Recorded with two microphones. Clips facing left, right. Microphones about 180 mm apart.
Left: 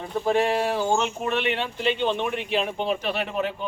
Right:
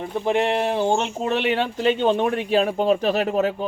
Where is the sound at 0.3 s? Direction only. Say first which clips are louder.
Right 1 dB; 20° right (ahead or behind).